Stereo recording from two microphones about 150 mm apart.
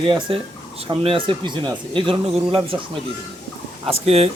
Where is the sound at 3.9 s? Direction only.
40° right (ahead or behind).